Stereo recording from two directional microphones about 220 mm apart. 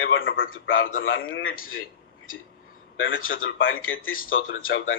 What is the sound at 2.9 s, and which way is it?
A man's voice, 65° left (ahead or behind).